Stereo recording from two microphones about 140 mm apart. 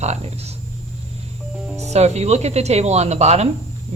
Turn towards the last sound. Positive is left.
turn(degrees=-55)  # may be behind; listen again after turning